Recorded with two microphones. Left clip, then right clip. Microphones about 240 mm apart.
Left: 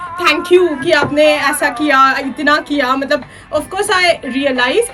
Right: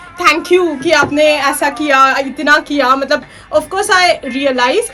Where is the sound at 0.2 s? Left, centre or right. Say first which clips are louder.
Right 1 dB; right.